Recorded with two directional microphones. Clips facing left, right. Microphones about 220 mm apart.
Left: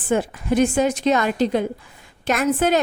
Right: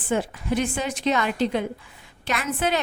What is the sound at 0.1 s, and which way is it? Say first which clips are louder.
A woman's voice: left 4 dB; 45° left (ahead or behind).